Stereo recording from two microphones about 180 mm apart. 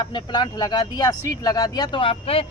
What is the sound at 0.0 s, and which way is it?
Speech, 25° left (ahead or behind).